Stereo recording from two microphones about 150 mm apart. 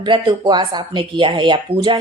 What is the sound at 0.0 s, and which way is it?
A woman's voice, 30° right (ahead or behind).